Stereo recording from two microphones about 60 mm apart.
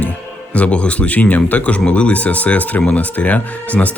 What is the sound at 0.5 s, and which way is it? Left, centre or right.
Speech, left.